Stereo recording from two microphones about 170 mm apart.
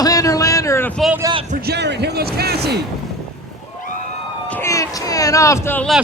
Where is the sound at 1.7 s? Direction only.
85° right.